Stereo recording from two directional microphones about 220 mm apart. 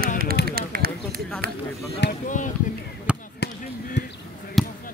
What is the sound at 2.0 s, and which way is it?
Speech, 40° left (ahead or behind).